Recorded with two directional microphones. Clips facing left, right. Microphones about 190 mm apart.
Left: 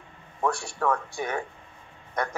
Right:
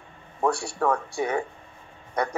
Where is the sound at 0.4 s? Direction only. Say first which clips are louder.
Right 3 dB; 30° right (ahead or behind).